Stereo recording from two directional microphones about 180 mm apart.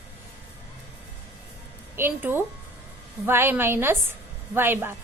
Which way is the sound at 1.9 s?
10° right (ahead or behind).